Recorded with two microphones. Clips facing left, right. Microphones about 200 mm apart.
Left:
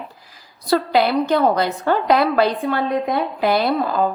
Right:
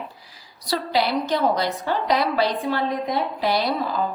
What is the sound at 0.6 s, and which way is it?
A woman's voice, 55° left (ahead or behind).